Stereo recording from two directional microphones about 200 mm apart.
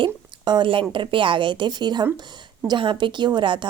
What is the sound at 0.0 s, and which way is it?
A woman's voice, 25° right (ahead or behind).